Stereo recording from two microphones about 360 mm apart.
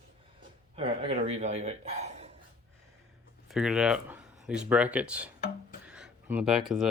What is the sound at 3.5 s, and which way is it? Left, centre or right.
Speech, centre.